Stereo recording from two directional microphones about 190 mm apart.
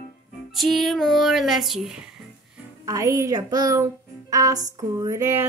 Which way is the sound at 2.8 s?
15° right (ahead or behind).